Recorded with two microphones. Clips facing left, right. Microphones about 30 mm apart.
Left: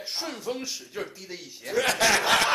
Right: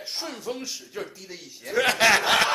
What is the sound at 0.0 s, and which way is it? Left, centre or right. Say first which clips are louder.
Speech: even; centre.